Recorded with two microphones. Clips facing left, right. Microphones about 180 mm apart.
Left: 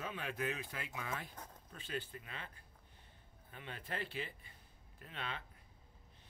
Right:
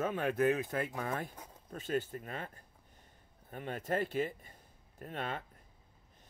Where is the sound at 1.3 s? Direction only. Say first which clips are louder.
Right 1 dB; 10° right (ahead or behind).